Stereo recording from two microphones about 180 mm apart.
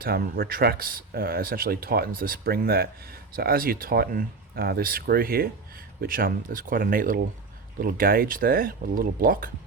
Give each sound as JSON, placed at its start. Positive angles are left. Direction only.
{"t": 0.0, "sound": "speech", "side_deg": -55}